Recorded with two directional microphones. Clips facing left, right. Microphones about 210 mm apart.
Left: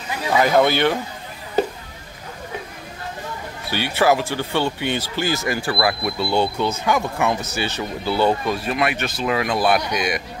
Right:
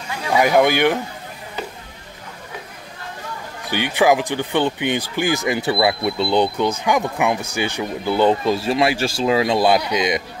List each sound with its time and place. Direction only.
0.3 s speech: 15° right (ahead or behind)
3.6 s speech: 15° right (ahead or behind)